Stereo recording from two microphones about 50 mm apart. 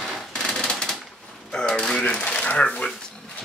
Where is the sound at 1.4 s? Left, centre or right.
Centre.